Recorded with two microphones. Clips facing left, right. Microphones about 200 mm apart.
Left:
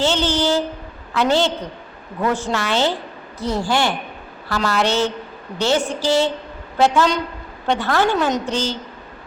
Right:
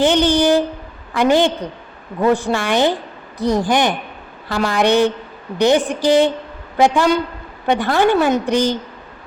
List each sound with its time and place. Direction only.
0.0 s a woman's voice: 15° right (ahead or behind)